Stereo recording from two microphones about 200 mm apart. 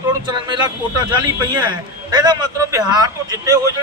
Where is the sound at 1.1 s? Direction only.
20° right (ahead or behind).